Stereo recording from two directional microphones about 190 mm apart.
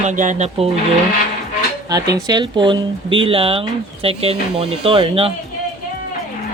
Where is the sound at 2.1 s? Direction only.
20° right (ahead or behind).